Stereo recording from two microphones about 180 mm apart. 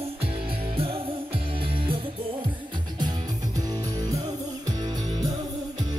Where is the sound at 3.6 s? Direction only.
20° right (ahead or behind).